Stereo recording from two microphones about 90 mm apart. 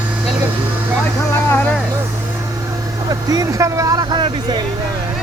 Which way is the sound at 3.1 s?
45° right (ahead or behind).